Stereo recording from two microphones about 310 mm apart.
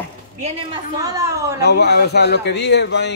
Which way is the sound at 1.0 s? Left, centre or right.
Centre.